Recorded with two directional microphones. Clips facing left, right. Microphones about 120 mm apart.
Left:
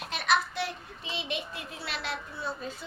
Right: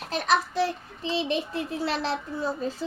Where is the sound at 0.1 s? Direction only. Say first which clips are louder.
Right 4 dB; 35° right (ahead or behind).